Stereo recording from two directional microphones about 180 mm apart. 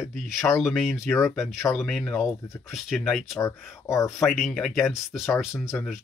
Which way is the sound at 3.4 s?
15° left (ahead or behind).